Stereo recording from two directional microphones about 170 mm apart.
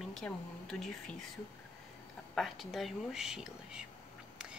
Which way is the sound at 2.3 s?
Centre (ahead or behind).